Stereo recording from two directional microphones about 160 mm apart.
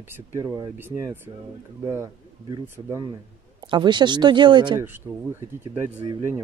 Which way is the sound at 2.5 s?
25° right (ahead or behind).